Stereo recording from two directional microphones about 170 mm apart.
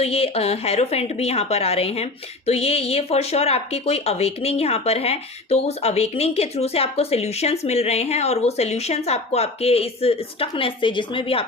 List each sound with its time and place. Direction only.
0.0 s speech: 35° left (ahead or behind)